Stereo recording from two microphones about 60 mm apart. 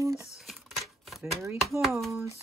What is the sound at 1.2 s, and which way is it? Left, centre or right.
Speech, right.